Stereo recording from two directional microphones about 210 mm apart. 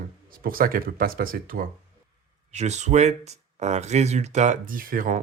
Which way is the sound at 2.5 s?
35° right (ahead or behind).